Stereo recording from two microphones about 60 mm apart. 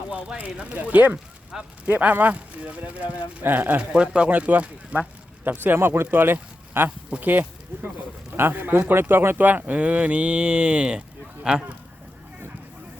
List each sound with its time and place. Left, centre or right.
0.3 s speech: right
1.5 s speech: centre
1.9 s speech: right
3.8 s speech: centre
5.5 s speech: right; by 11.6 s centre